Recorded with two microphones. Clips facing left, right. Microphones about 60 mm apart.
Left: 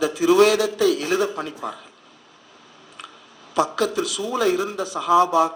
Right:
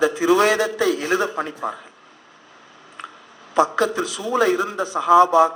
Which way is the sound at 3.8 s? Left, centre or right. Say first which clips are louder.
Right 1 dB; right.